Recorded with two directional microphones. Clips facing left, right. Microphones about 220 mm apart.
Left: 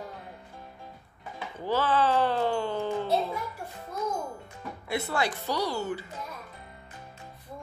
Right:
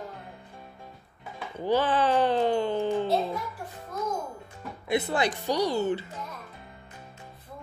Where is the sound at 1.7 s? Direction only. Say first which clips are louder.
Right 2 dB; 15° right (ahead or behind).